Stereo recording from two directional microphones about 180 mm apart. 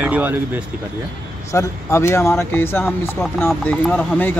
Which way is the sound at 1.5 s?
15° left (ahead or behind).